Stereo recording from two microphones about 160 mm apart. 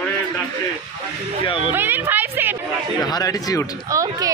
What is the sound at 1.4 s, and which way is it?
Speech, 30° left (ahead or behind).